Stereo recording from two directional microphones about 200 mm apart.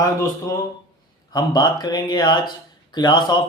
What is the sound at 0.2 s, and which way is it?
Speech, 15° left (ahead or behind).